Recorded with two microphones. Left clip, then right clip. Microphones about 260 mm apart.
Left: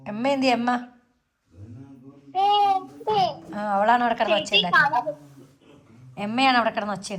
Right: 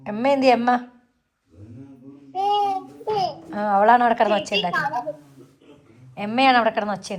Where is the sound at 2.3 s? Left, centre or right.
Left.